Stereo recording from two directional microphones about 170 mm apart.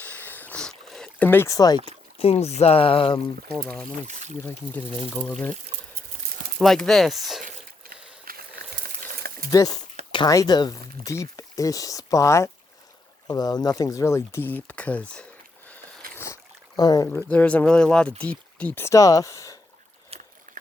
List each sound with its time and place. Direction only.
0.0 s a sound: 10° left (ahead or behind)
2.1 s speech: 35° left (ahead or behind)
3.5 s speech: 5° left (ahead or behind)
4.0 s speech: 45° right (ahead or behind)
4.4 s speech: 10° left (ahead or behind)
6.6 s speech: centre (ahead or behind)
8.2 s a sound: 60° right (ahead or behind)
9.5 s speech: 20° left (ahead or behind); by 15.3 s 5° left (ahead or behind)
16.1 s rowboat: 15° left (ahead or behind)
17.2 s speech: 5° left (ahead or behind)